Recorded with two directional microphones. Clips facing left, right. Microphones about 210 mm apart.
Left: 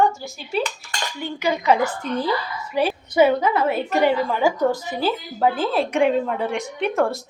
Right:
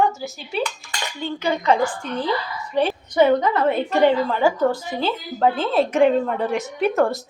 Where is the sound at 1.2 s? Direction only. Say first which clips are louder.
Even; 10° left (ahead or behind).